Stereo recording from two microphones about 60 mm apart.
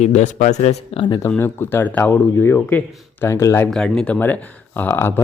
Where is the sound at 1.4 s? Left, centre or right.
Left.